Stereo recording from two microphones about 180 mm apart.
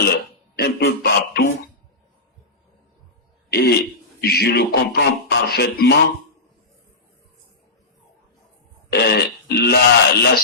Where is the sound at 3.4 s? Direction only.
65° left (ahead or behind).